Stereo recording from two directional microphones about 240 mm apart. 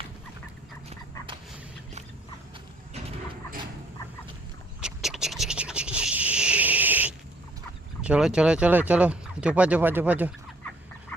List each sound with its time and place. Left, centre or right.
2.9 s a sound: right
4.8 s scratch: centre
8.0 s speech: centre